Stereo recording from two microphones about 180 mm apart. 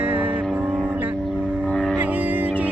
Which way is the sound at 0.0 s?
10° right (ahead or behind).